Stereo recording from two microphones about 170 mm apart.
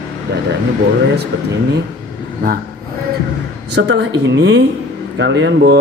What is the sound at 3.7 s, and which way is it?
Speech, 85° right.